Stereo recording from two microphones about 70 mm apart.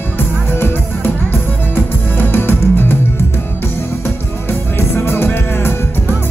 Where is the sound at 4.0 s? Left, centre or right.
Left.